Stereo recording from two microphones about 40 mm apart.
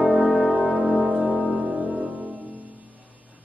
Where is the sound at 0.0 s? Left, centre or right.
Right.